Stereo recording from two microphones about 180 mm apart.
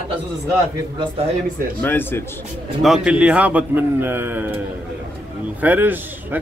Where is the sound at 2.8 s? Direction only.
5° right (ahead or behind).